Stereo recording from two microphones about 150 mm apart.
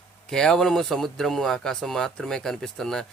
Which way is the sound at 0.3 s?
5° left (ahead or behind).